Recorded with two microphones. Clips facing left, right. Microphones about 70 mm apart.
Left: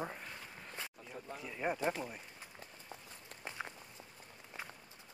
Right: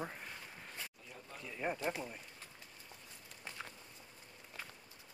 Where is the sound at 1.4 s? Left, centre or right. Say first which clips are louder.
Left 2 dB; centre.